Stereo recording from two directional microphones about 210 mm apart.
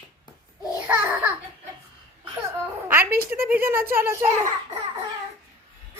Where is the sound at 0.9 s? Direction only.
10° right (ahead or behind).